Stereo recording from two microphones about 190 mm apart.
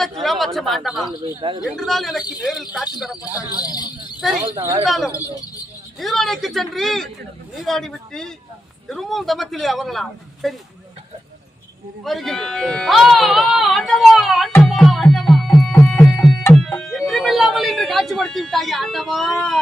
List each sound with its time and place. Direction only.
0.0 s speech: centre (ahead or behind)
1.4 s speech: 25° right (ahead or behind)
1.6 s speech: centre (ahead or behind)
3.3 s speech: 20° left (ahead or behind)
4.2 s speech: centre (ahead or behind)
12.0 s speech: centre (ahead or behind)
14.5 s music: 5° left (ahead or behind)
17.0 s a sound: centre (ahead or behind)